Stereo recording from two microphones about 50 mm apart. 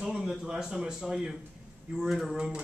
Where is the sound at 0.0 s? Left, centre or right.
Centre.